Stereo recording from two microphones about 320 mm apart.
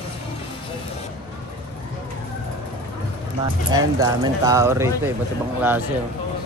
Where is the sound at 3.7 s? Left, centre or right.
Centre.